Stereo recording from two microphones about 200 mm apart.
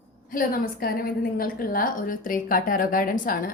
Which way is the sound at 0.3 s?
45° left (ahead or behind).